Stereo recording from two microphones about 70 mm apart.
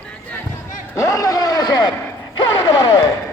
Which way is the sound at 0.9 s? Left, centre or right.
Left.